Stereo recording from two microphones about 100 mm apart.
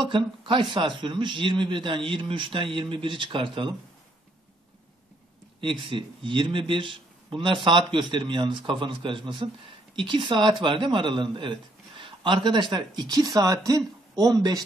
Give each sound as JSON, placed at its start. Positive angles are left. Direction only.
{"t": 0.0, "sound": "a man's voice", "side_deg": -55}
{"t": 5.6, "sound": "a man's voice", "side_deg": -55}